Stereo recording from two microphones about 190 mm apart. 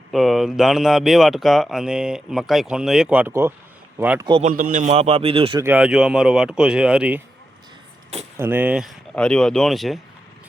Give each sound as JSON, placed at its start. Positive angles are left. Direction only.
{"t": 0.1, "sound": "speech", "side_deg": 0}
{"t": 4.4, "sound": "a man's voice", "side_deg": -45}
{"t": 5.5, "sound": "speech", "side_deg": -10}
{"t": 8.4, "sound": "speech", "side_deg": -10}